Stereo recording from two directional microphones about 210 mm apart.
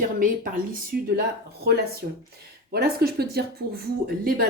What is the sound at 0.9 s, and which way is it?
Speech, 45° right (ahead or behind).